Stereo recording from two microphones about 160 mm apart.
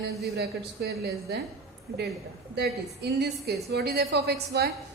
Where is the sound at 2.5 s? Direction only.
90° right.